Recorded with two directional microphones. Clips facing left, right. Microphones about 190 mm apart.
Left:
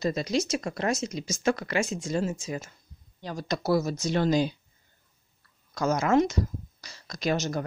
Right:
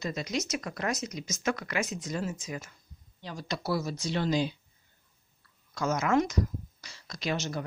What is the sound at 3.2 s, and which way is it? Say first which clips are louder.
Speech: left 5 dB; 45° left (ahead or behind).